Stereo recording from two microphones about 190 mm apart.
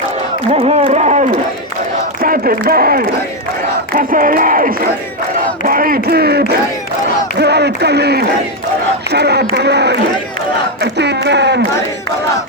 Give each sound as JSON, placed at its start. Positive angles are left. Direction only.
{"t": 0.5, "sound": "speech", "side_deg": -35}
{"t": 2.2, "sound": "a man's voice", "side_deg": -50}